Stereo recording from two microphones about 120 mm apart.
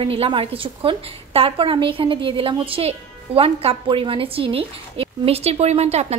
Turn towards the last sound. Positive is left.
turn(degrees=-65)  # may be behind; listen again after turning